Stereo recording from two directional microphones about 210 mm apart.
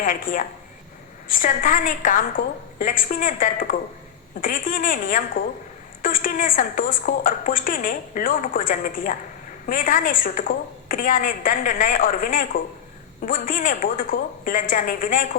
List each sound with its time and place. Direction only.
0.0 s a woman's voice: 40° left (ahead or behind)